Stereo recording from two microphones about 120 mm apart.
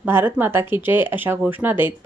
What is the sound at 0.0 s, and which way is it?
A woman's voice, 20° right (ahead or behind).